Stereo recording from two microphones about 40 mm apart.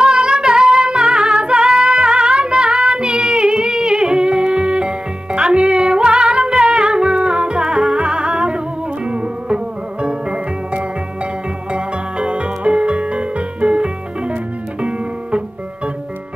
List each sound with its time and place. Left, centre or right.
0.0 s music: right
1.9 s singing: right
10.0 s music: right